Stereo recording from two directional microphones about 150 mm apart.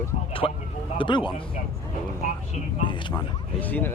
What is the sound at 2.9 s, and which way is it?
Speech, 35° left (ahead or behind).